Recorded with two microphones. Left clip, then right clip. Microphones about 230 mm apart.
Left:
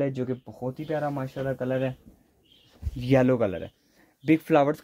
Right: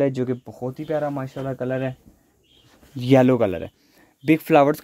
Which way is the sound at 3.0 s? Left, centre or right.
Right.